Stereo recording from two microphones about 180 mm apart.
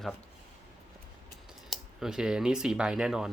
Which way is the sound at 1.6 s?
Centre (ahead or behind).